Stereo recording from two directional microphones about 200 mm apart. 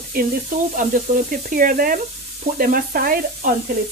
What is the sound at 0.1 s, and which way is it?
Speech, 45° right (ahead or behind).